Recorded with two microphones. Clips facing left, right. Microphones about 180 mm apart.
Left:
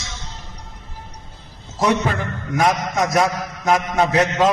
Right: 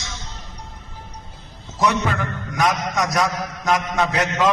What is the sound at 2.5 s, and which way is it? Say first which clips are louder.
A man's voice: left 3 dB; 25° left (ahead or behind).